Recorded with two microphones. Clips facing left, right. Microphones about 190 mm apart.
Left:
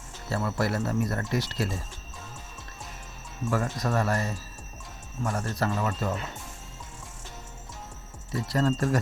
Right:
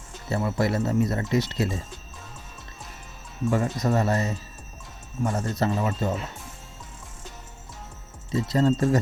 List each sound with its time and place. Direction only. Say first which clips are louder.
0.3 s speech: right 3 dB; 20° right (ahead or behind)
3.5 s speech: right 3 dB; 20° right (ahead or behind)
8.3 s speech: right 4 dB; 20° right (ahead or behind)